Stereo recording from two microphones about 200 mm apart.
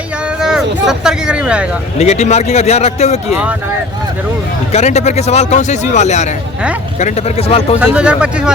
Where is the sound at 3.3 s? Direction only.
5° right (ahead or behind).